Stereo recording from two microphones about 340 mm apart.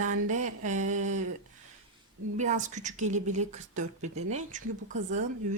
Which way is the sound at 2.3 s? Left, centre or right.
Right.